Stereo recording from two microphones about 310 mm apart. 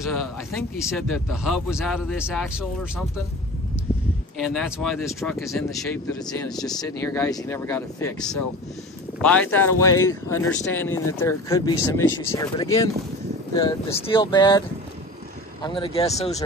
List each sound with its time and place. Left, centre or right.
0.0 s speech: centre
4.4 s speech: centre
15.6 s speech: centre